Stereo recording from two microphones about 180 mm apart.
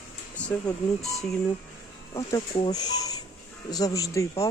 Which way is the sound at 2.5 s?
25° left (ahead or behind).